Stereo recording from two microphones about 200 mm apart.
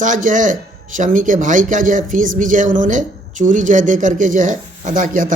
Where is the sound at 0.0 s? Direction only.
40° right (ahead or behind).